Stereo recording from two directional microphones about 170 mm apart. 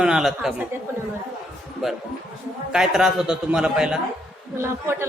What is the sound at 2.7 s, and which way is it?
A man's voice, 5° right (ahead or behind).